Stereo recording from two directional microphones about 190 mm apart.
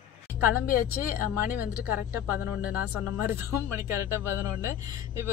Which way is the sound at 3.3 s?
15° right (ahead or behind).